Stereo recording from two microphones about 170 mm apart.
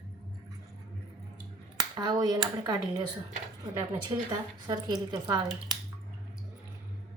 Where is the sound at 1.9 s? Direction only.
25° right (ahead or behind).